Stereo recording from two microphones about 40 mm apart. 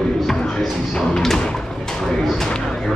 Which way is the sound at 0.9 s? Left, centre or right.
Centre.